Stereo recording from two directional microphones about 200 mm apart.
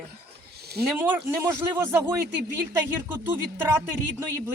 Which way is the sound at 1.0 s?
10° right (ahead or behind).